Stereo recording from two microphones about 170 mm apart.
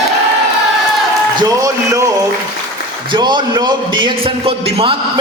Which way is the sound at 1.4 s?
20° right (ahead or behind).